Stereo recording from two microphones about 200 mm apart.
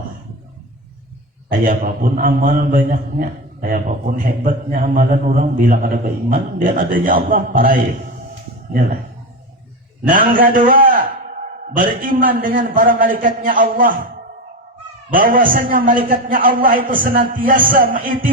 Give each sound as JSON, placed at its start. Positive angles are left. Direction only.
{"t": 1.5, "sound": "a man's voice", "side_deg": -45}
{"t": 10.1, "sound": "a man's voice", "side_deg": -45}
{"t": 12.0, "sound": "a man's voice", "side_deg": -45}
{"t": 15.1, "sound": "a man's voice", "side_deg": -45}